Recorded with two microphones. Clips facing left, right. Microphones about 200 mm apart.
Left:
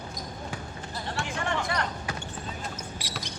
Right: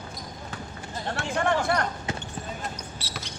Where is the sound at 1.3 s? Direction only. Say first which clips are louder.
Right 8 dB; 55° right (ahead or behind).